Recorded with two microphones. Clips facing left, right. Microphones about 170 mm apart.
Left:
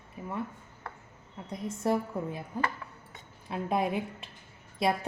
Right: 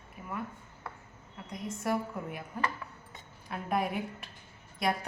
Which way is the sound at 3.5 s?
25° left (ahead or behind).